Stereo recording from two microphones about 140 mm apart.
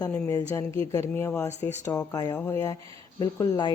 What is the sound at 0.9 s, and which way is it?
Speech, 20° left (ahead or behind).